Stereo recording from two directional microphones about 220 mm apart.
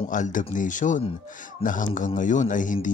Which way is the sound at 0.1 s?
35° left (ahead or behind).